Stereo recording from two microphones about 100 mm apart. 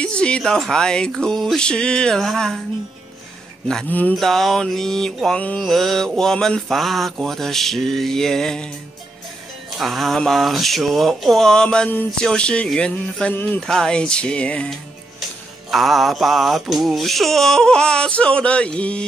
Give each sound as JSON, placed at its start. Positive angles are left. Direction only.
{"t": 0.0, "sound": "speech", "side_deg": 10}
{"t": 4.1, "sound": "a sound", "side_deg": 0}
{"t": 12.3, "sound": "speech", "side_deg": 10}
{"t": 13.3, "sound": "music", "side_deg": 20}
{"t": 13.6, "sound": "speech", "side_deg": 5}
{"t": 15.7, "sound": "a sound", "side_deg": 0}